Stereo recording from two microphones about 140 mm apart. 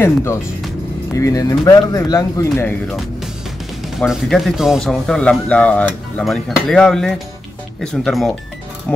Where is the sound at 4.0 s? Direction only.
Centre (ahead or behind).